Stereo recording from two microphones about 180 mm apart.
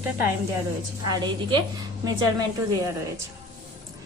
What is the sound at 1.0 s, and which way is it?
Speech, 25° right (ahead or behind).